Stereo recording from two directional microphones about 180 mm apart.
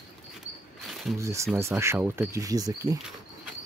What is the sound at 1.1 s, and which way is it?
Speech, 15° right (ahead or behind).